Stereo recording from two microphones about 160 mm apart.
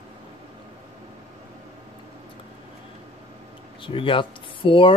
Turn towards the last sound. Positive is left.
turn(degrees=35)  # may be behind; listen again after turning